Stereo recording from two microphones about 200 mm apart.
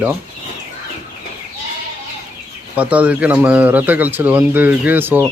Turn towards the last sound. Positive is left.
turn(degrees=-10)  # may be behind; listen again after turning